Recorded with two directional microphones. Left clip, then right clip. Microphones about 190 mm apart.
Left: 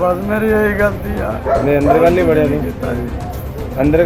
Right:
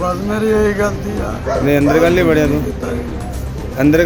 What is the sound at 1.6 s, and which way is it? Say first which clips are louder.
Speech: even; 10° right (ahead or behind).